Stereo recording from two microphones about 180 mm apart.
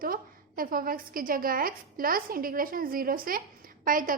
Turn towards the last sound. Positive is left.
turn(degrees=-50)  # may be behind; listen again after turning